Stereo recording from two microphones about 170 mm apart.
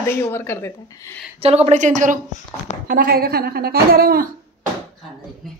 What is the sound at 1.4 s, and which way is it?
Speech, 40° right (ahead or behind).